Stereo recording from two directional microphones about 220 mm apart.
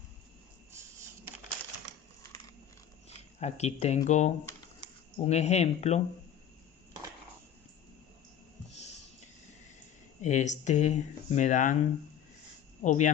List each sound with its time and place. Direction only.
3.4 s speech: 30° left (ahead or behind)
10.2 s speech: 35° left (ahead or behind)
12.8 s speech: 35° left (ahead or behind)